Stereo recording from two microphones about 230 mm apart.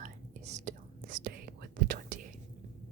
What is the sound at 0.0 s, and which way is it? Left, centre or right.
Whispering, right.